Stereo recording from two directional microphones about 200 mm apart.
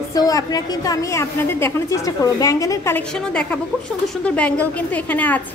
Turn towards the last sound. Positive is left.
turn(degrees=5)  # may be behind; listen again after turning